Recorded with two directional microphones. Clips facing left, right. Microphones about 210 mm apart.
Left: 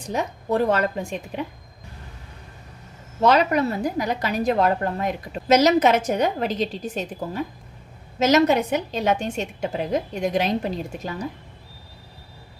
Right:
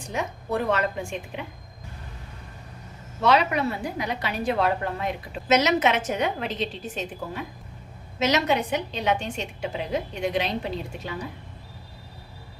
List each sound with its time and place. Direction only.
0.1 s a woman's voice: 40° left (ahead or behind)
3.2 s a woman's voice: 40° left (ahead or behind)
8.2 s a woman's voice: 45° left (ahead or behind)